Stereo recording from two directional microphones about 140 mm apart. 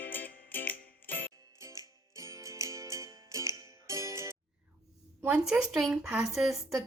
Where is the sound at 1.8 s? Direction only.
25° right (ahead or behind).